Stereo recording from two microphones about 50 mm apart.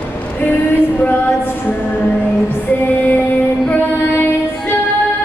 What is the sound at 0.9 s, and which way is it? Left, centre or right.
Music, left.